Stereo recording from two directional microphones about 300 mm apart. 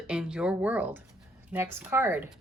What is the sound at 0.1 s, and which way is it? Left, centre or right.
A woman's voice, centre.